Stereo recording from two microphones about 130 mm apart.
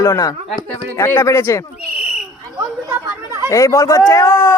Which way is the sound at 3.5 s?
25° left (ahead or behind).